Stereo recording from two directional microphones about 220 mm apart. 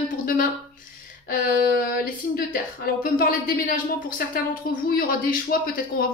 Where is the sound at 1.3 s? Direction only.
40° left (ahead or behind).